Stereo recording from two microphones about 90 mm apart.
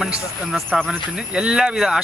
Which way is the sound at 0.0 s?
5° right (ahead or behind).